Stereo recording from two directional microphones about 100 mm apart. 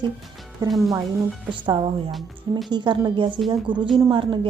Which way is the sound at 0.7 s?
Centre (ahead or behind).